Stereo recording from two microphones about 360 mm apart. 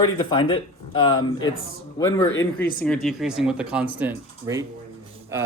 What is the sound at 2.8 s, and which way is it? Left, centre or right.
Speech, centre.